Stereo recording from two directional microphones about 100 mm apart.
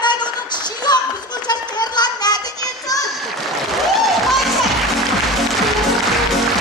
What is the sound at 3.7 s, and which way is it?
Music, centre (ahead or behind).